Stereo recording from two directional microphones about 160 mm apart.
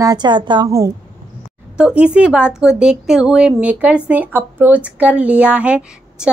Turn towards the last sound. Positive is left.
turn(degrees=-10)  # may be behind; listen again after turning